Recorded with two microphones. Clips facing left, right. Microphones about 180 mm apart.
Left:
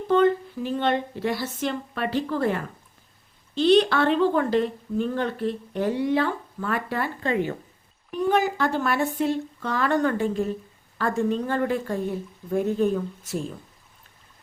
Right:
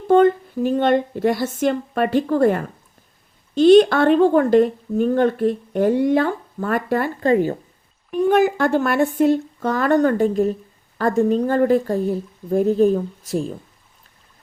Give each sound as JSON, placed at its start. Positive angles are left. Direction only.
{"t": 0.1, "sound": "a woman's voice", "side_deg": -50}
{"t": 8.3, "sound": "a woman's voice", "side_deg": -50}